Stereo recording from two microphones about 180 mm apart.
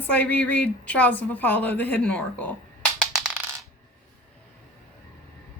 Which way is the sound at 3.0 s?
Centre (ahead or behind).